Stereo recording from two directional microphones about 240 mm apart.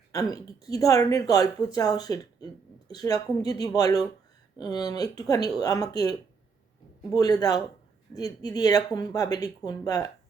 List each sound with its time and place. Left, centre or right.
0.1 s speech: centre